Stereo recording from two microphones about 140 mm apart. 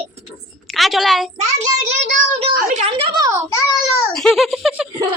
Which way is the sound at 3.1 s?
25° right (ahead or behind).